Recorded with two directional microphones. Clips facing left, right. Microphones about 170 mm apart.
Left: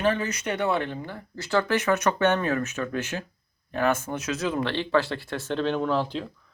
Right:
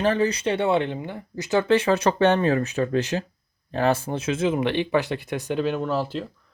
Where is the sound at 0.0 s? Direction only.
35° right (ahead or behind).